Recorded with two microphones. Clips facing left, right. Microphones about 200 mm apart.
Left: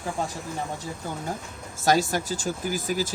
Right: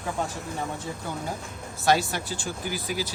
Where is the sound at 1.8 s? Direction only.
45° left (ahead or behind).